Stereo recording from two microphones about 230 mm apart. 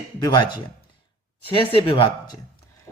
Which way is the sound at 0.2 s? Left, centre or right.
Centre.